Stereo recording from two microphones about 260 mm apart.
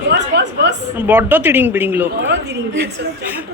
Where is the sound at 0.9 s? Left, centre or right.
Centre.